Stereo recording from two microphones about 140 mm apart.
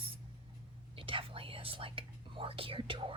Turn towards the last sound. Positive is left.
turn(degrees=-35)  # may be behind; listen again after turning